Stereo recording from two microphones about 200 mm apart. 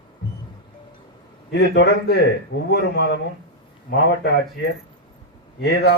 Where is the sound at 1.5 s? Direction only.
55° left (ahead or behind).